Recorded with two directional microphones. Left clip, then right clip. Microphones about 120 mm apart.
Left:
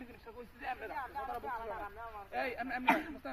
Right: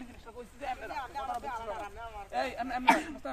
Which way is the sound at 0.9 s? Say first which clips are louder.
Right 4 dB; 5° left (ahead or behind).